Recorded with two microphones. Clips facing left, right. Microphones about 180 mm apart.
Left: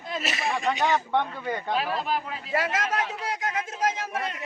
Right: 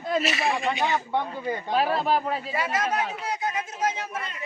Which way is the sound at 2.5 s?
90° left.